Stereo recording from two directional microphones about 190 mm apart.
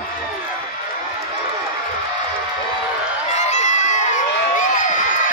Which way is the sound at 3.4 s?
35° left (ahead or behind).